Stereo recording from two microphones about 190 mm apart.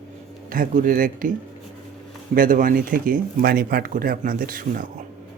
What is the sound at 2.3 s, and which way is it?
Speech, 45° right (ahead or behind).